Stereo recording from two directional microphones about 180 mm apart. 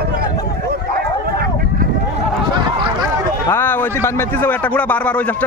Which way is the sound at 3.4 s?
10° left (ahead or behind).